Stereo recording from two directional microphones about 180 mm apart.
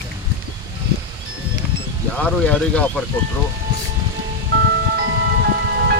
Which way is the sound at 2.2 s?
10° left (ahead or behind).